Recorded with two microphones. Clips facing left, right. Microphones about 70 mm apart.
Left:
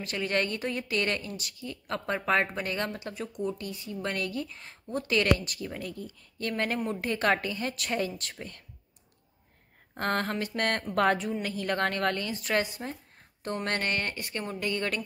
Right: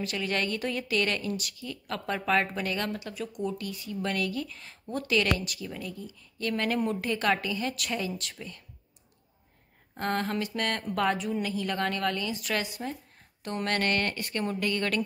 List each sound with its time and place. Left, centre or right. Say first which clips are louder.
0.0 s speech: left 1 dB; left
9.9 s speech: even; left
13.6 s speech: right 3 dB; left